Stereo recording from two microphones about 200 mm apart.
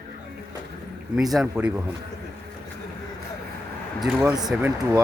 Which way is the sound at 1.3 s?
5° right (ahead or behind).